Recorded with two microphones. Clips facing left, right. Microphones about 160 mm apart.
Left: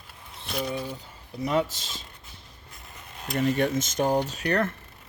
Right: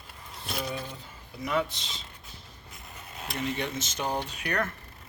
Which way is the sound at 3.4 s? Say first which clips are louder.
Left 8 dB; 45° left (ahead or behind).